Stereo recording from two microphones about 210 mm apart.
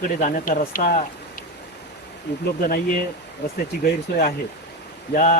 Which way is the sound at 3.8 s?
45° left (ahead or behind).